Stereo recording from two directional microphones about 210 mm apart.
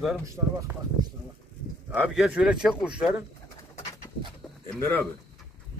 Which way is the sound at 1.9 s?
5° right (ahead or behind).